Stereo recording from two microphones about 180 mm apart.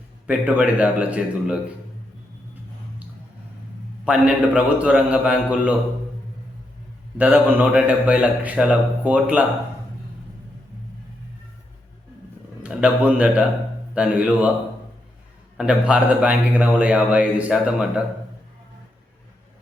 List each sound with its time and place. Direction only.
0.3 s a man's voice: 10° right (ahead or behind)
4.0 s a man's voice: 5° right (ahead or behind)
7.2 s a man's voice: 10° right (ahead or behind)
12.6 s a man's voice: 5° right (ahead or behind)
15.5 s a man's voice: 5° right (ahead or behind)